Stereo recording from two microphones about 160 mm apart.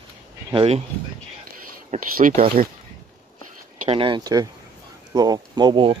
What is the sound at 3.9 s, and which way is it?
Speech, 30° right (ahead or behind).